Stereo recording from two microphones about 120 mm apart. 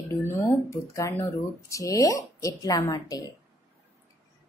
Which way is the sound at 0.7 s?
25° left (ahead or behind).